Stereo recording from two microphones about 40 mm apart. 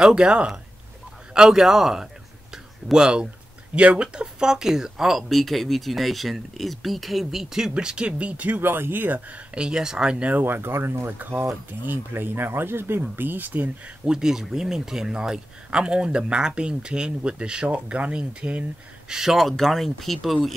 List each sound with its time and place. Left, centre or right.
0.0 s speech: right
2.5 s a sound: centre
3.7 s speech: right; by 7.7 s centre
7.7 s speech: right
8.2 s speech: right
8.5 s speech: right
9.5 s speech: right
10.4 s speech: right
13.1 s speech: right
14.0 s speech: centre; by 18.7 s right
19.0 s speech: centre
19.3 s speech: centre